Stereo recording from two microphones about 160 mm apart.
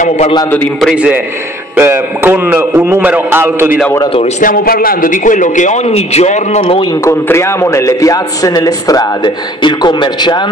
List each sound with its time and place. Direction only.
0.7 s a man's voice: 5° right (ahead or behind)
4.4 s a man's voice: 60° left (ahead or behind); by 6.6 s 45° left (ahead or behind)
6.6 s a man's voice: 30° left (ahead or behind)
7.1 s a man's voice: 15° left (ahead or behind)